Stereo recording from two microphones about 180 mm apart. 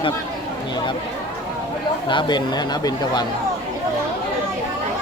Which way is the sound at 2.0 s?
25° left (ahead or behind).